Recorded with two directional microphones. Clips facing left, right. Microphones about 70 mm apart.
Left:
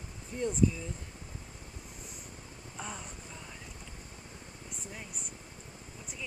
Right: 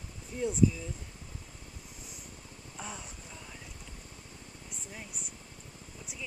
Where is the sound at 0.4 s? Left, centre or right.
Centre.